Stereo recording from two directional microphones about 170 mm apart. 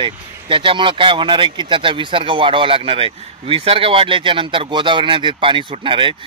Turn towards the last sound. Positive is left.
turn(degrees=-30)  # may be behind; listen again after turning